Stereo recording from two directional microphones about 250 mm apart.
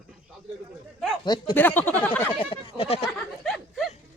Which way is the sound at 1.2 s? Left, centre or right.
Centre.